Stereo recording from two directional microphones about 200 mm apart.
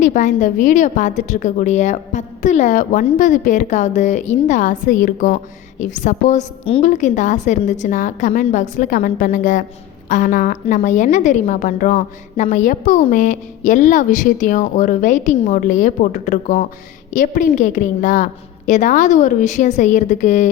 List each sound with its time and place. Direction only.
0.0 s a woman's voice: 40° left (ahead or behind)